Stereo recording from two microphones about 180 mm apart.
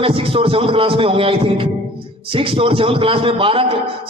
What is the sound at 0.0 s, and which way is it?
A man's voice, 30° right (ahead or behind).